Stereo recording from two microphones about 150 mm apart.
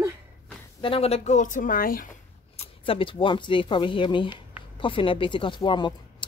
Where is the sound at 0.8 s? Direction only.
40° left (ahead or behind); by 2.1 s 70° left (ahead or behind).